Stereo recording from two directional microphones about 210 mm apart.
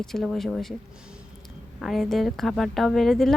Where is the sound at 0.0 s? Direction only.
Centre (ahead or behind).